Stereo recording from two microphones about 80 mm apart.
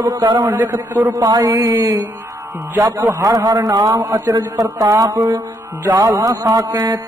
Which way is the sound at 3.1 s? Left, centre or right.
Right.